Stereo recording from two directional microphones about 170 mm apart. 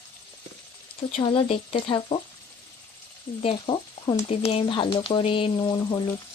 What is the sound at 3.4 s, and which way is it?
Speech, 35° left (ahead or behind).